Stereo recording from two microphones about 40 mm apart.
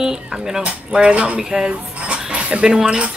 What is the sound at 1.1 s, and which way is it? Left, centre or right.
Speech, right.